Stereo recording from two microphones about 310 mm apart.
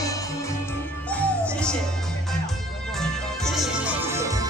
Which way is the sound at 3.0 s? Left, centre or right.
Centre.